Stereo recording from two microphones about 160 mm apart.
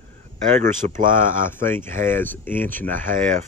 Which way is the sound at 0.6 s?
55° right (ahead or behind).